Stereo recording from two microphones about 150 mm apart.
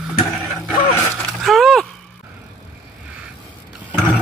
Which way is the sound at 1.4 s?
Centre (ahead or behind).